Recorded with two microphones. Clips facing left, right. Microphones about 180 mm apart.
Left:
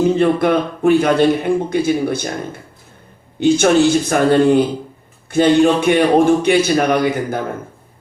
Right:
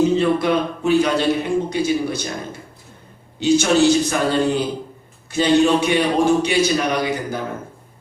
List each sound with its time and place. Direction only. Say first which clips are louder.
0.2 s a man's voice: left 3 dB; 55° left (ahead or behind)